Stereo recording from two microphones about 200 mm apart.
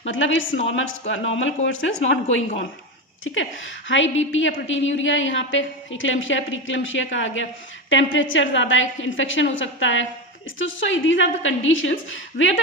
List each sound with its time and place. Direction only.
0.0 s a woman's voice: 70° left (ahead or behind)
3.8 s a woman's voice: 70° left (ahead or behind)